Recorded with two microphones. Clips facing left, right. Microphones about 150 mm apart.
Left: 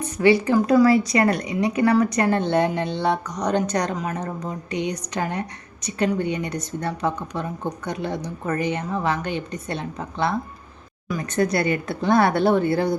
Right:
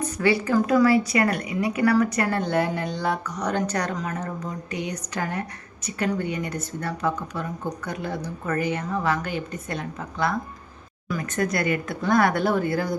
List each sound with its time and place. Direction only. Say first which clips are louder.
0.2 s a woman's voice: left 4 dB; 20° left (ahead or behind)